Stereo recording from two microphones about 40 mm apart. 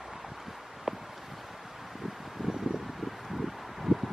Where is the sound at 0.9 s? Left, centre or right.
Centre.